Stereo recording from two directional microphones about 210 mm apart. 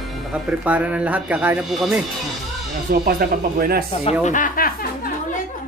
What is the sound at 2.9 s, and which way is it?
Speech, 45° right (ahead or behind).